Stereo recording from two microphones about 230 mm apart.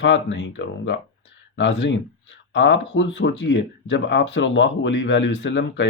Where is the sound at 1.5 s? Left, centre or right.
Left.